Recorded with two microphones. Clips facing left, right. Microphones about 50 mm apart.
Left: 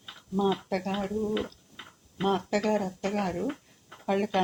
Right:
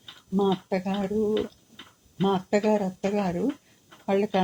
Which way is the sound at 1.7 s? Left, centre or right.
Left.